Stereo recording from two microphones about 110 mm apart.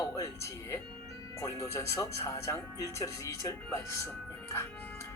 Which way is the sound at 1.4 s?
30° left (ahead or behind).